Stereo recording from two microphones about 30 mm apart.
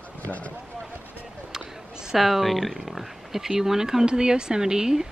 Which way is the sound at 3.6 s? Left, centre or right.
Centre.